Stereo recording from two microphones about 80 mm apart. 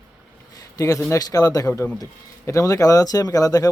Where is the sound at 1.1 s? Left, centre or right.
Left.